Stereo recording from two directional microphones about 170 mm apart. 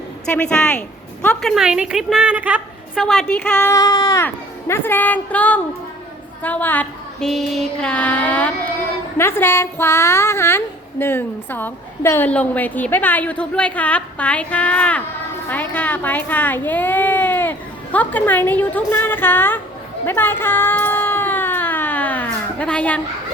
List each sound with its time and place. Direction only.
0.3 s a woman's voice: 5° left (ahead or behind)
3.2 s a woman's voice: 15° left (ahead or behind)
20.1 s a sound: 10° left (ahead or behind)